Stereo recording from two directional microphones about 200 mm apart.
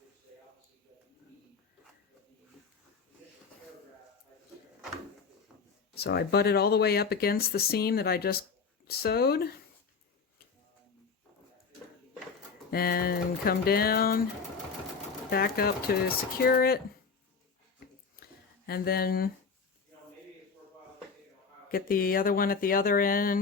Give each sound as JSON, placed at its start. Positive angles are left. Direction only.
{"t": 5.9, "sound": "speech", "side_deg": 55}
{"t": 12.7, "sound": "speech", "side_deg": 50}
{"t": 15.3, "sound": "speech", "side_deg": 50}
{"t": 18.2, "sound": "a sound", "side_deg": 50}
{"t": 21.7, "sound": "speech", "side_deg": 45}